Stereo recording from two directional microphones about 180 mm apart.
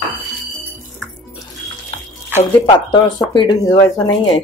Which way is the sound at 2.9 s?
25° left (ahead or behind).